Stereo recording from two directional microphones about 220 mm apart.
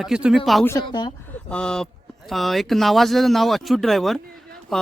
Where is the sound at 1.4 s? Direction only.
5° left (ahead or behind).